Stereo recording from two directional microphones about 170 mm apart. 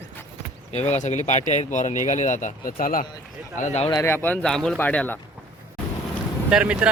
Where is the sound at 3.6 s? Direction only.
40° left (ahead or behind).